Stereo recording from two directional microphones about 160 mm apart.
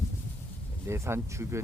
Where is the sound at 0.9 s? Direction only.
15° right (ahead or behind).